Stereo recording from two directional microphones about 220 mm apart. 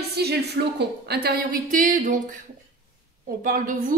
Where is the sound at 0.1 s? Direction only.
45° right (ahead or behind).